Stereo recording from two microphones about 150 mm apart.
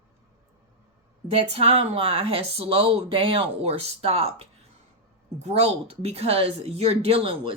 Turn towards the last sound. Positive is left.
turn(degrees=-40)  # may be behind; listen again after turning